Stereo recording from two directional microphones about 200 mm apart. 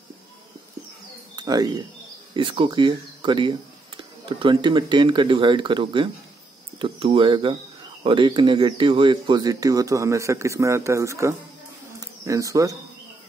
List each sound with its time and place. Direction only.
1.3 s speech: 20° right (ahead or behind)